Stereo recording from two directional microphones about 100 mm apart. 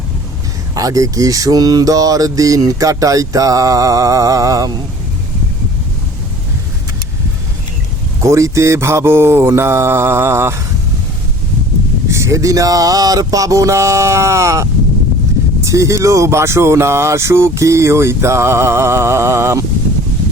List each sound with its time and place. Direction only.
0.7 s speech: 35° right (ahead or behind)
8.2 s speech: 30° right (ahead or behind)
12.0 s speech: 30° right (ahead or behind)